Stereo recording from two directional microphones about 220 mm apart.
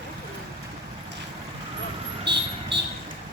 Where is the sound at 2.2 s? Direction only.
50° right (ahead or behind).